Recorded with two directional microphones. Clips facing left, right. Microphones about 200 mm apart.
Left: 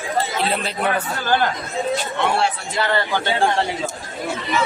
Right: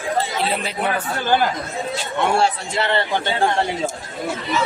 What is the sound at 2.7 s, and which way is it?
Speech, 25° right (ahead or behind).